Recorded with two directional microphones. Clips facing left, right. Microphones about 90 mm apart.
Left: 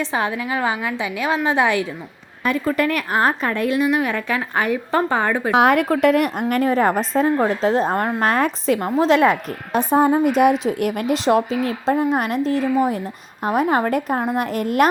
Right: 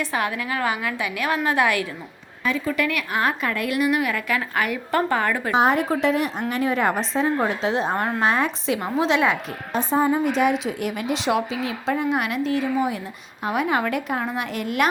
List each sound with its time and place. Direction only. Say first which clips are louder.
0.0 s a woman's voice: left 3 dB; 25° left (ahead or behind)
2.4 s a woman's voice: left 4 dB; 50° left (ahead or behind); by 5.5 s 20° left (ahead or behind)
5.5 s a woman's voice: left 4 dB; 65° left (ahead or behind)
6.5 s a woman's voice: left 4 dB; 45° left (ahead or behind)